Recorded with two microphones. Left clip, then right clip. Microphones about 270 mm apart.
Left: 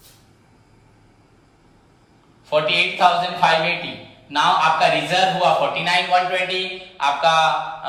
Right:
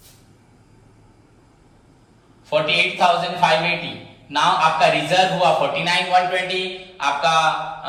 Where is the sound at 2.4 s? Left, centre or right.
Centre.